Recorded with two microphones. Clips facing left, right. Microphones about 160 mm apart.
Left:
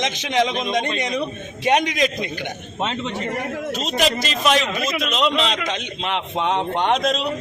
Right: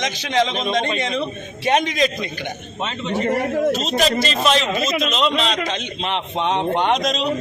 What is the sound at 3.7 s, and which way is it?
A man's voice, 15° left (ahead or behind).